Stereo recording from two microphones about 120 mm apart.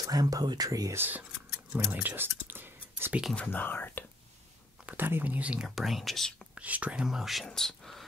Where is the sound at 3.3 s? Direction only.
15° left (ahead or behind).